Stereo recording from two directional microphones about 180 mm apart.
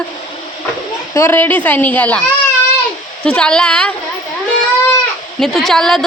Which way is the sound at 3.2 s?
5° left (ahead or behind).